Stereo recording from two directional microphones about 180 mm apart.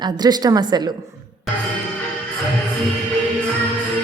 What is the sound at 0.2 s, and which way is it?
Speech, 25° right (ahead or behind).